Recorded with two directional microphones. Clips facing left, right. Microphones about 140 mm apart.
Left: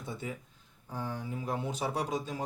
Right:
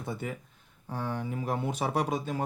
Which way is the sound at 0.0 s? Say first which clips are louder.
Right 4 dB; 60° right (ahead or behind).